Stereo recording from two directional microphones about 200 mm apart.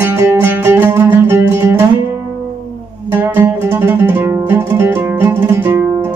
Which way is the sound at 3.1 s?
10° right (ahead or behind).